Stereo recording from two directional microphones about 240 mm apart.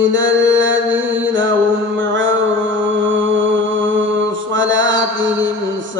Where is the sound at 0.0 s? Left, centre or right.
Right.